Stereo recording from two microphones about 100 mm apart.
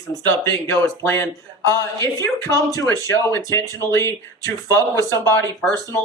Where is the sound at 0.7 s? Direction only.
25° left (ahead or behind).